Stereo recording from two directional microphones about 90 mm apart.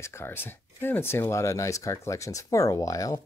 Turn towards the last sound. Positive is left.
turn(degrees=40)  # may be behind; listen again after turning